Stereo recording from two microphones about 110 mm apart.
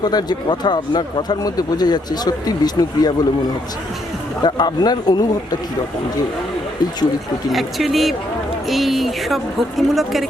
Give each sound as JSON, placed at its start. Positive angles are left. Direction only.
{"t": 0.0, "sound": "speech", "side_deg": 40}
{"t": 4.4, "sound": "speech", "side_deg": 40}
{"t": 7.5, "sound": "speech", "side_deg": 0}